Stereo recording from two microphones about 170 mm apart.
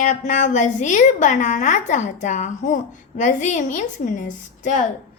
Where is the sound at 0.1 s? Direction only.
45° left (ahead or behind).